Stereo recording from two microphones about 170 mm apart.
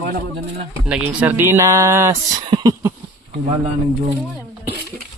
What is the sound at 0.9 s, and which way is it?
Speech, 5° right (ahead or behind).